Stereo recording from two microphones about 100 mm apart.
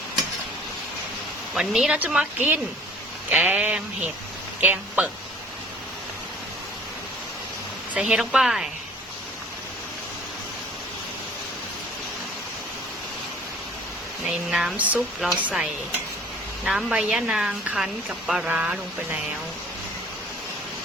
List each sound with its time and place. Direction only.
1.5 s a woman's voice: 5° right (ahead or behind)
7.9 s a woman's voice: 10° right (ahead or behind)
14.3 s a woman's voice: 5° right (ahead or behind)